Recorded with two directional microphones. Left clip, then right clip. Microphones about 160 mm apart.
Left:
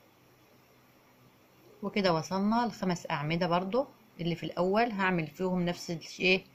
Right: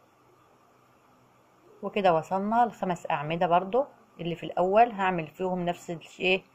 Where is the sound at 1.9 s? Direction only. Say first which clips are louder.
Right 5 dB; 30° left (ahead or behind).